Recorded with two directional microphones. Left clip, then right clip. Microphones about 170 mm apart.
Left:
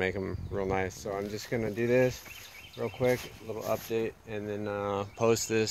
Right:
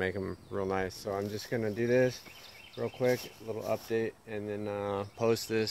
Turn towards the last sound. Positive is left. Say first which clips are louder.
# left 3 dB
turn(degrees=20)  # may be behind; listen again after turning